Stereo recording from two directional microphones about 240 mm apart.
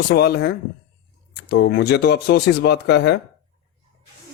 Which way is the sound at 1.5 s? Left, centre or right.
Left.